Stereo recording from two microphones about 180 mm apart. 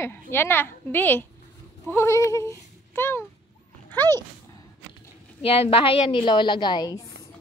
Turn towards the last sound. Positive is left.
turn(degrees=20)  # may be behind; listen again after turning